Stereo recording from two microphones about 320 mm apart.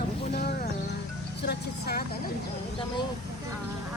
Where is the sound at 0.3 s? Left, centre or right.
Left.